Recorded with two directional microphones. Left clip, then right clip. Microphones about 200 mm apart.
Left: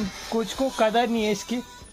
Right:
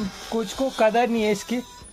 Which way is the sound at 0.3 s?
10° right (ahead or behind).